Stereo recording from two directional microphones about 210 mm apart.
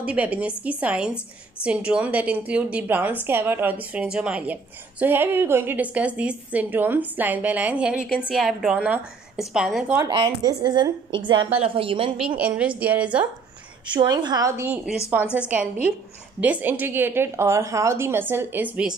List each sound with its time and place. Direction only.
0.0 s a woman's voice: 5° right (ahead or behind)
9.9 s a woman's voice: 20° right (ahead or behind)
12.4 s a woman's voice: 5° right (ahead or behind)
13.8 s a woman's voice: 20° right (ahead or behind)